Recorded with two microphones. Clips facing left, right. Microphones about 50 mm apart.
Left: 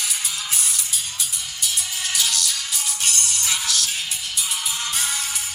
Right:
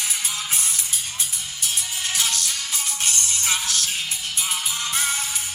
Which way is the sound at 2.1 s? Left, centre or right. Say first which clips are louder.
Left 2 dB; right.